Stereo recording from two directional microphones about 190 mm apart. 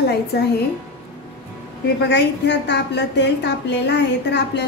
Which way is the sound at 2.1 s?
65° left (ahead or behind).